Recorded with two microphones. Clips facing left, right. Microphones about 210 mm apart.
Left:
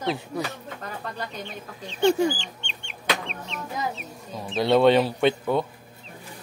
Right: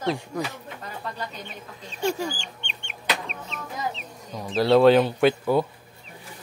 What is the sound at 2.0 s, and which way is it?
Speech, 70° left (ahead or behind).